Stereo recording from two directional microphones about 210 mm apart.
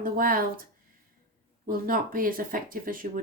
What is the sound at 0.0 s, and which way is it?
Speech, 45° right (ahead or behind).